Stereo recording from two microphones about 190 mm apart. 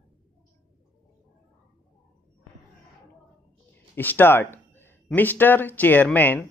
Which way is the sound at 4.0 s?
10° left (ahead or behind).